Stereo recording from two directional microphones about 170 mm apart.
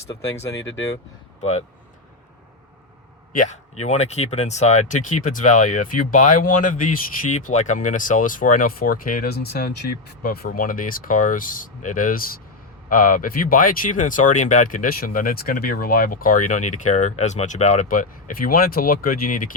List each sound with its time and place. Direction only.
1.4 s speech: 40° left (ahead or behind)
3.3 s speech: 45° left (ahead or behind)